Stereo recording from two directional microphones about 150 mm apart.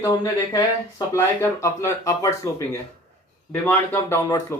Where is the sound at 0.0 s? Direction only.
25° left (ahead or behind).